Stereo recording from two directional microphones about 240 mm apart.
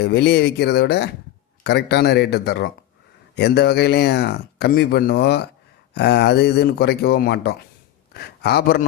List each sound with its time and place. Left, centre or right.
0.0 s speech: left